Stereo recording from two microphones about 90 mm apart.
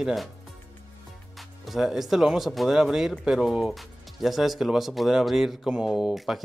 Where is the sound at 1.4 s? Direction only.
Centre (ahead or behind).